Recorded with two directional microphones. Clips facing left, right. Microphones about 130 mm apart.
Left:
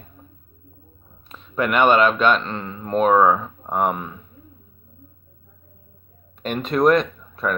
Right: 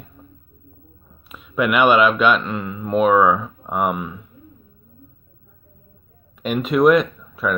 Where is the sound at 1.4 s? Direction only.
35° left (ahead or behind).